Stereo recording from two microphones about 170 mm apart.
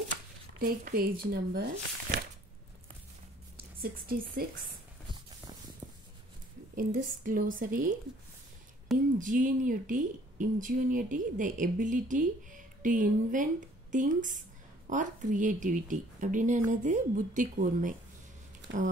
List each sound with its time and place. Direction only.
0.6 s speech: 60° right (ahead or behind)
3.5 s a woman's voice: 60° right (ahead or behind)
6.7 s speech: 55° right (ahead or behind)
8.9 s speech: centre (ahead or behind)
9.2 s speech: 50° right (ahead or behind)
18.6 s a sound: 90° right